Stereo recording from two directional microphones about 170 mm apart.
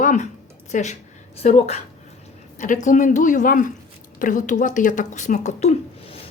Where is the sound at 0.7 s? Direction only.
45° left (ahead or behind).